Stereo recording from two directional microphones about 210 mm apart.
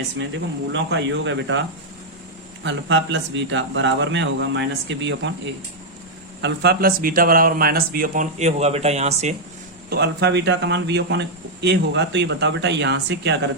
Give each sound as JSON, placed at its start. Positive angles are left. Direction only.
{"t": 0.7, "sound": "speech", "side_deg": -55}
{"t": 2.6, "sound": "speech", "side_deg": -60}
{"t": 6.4, "sound": "speech", "side_deg": -50}
{"t": 9.9, "sound": "speech", "side_deg": -55}